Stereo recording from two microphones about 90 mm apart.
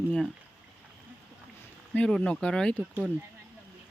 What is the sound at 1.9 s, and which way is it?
Speech, 15° left (ahead or behind).